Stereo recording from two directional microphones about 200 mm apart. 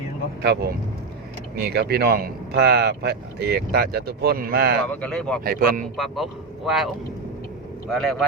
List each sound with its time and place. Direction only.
0.4 s speech: 55° right (ahead or behind)
4.9 s speech: 5° left (ahead or behind)
5.4 s speech: 45° right (ahead or behind)
6.7 s speech: centre (ahead or behind)